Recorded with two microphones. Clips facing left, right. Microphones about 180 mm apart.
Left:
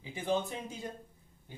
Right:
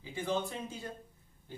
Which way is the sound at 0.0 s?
15° left (ahead or behind).